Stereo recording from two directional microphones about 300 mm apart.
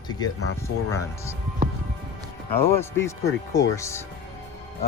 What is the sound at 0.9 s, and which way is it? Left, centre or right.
Speech, centre.